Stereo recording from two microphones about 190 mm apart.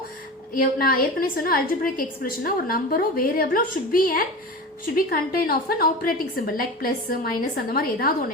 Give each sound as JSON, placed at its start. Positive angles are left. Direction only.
{"t": 0.5, "sound": "a woman's voice", "side_deg": 50}